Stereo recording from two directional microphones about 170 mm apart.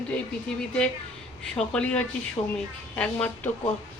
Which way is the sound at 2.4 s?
20° left (ahead or behind).